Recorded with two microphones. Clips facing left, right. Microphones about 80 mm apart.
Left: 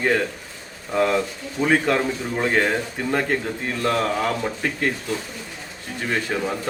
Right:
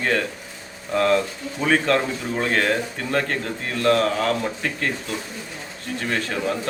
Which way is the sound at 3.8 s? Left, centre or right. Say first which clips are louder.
Right 3 dB; centre.